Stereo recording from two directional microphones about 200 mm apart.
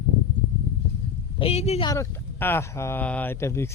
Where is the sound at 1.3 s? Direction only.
30° left (ahead or behind).